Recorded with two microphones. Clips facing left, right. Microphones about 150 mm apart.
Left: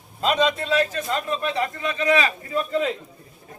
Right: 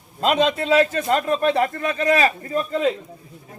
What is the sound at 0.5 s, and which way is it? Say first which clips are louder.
Speech: right 5 dB; 65° right (ahead or behind).